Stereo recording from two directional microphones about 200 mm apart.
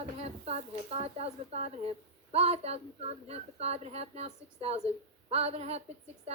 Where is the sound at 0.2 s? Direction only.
30° right (ahead or behind).